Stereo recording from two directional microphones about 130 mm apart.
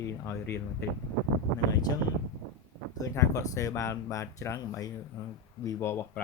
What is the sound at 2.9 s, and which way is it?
Speech, 25° left (ahead or behind).